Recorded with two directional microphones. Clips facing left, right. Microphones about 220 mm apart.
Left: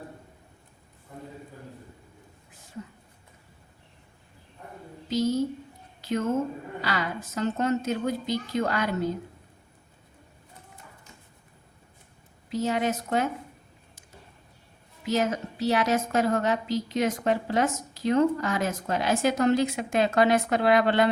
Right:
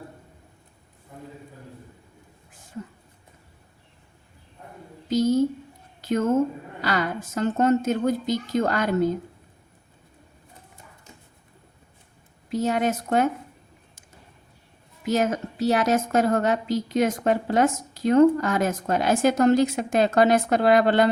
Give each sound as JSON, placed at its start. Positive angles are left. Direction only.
{"t": 5.0, "sound": "a sound", "side_deg": -50}
{"t": 7.3, "sound": "a woman's voice", "side_deg": -50}
{"t": 12.5, "sound": "a woman's voice", "side_deg": -50}
{"t": 15.0, "sound": "a woman's voice", "side_deg": -50}